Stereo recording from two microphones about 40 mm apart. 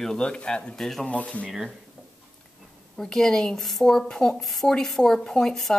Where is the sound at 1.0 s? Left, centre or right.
Left.